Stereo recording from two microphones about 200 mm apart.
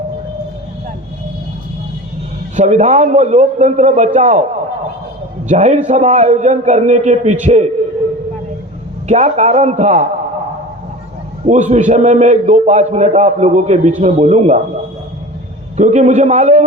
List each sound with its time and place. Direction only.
2.6 s a man's voice: 35° right (ahead or behind)
5.5 s a man's voice: 35° right (ahead or behind)
9.0 s a man's voice: 35° right (ahead or behind)
11.4 s a man's voice: 35° right (ahead or behind)
15.8 s a man's voice: 35° right (ahead or behind)